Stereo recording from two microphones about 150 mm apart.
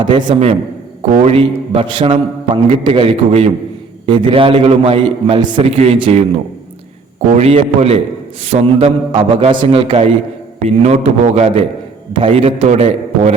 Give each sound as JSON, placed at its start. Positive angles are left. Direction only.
{"t": 0.0, "sound": "a man's voice", "side_deg": -30}
{"t": 1.1, "sound": "a man's voice", "side_deg": -40}
{"t": 7.3, "sound": "a man's voice", "side_deg": -45}
{"t": 12.6, "sound": "a man's voice", "side_deg": -50}